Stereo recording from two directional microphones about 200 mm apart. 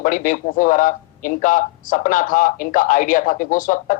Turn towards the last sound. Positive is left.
turn(degrees=40)  # may be behind; listen again after turning